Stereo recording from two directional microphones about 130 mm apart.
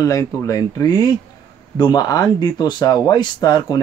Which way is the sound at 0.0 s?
25° left (ahead or behind).